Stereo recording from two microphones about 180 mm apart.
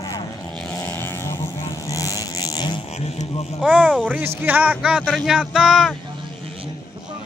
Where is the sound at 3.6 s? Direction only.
5° right (ahead or behind).